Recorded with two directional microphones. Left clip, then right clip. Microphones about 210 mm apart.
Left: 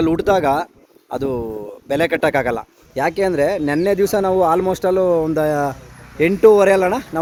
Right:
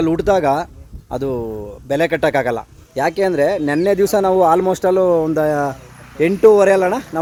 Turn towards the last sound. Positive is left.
turn(degrees=15)  # may be behind; listen again after turning